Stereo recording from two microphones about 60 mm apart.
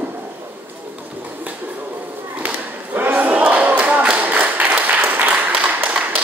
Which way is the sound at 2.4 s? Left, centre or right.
Right.